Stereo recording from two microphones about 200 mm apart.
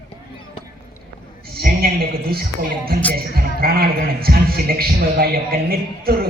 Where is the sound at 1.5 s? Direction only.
50° right (ahead or behind).